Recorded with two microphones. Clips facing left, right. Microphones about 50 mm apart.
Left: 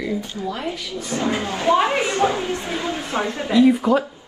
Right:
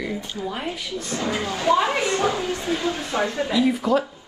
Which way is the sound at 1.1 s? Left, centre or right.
Left.